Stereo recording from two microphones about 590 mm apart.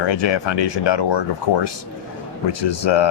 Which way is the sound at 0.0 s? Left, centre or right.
Left.